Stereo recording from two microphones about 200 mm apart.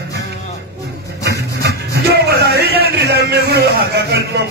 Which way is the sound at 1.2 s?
55° right (ahead or behind).